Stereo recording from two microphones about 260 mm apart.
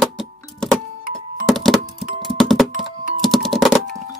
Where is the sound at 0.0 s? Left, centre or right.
Centre.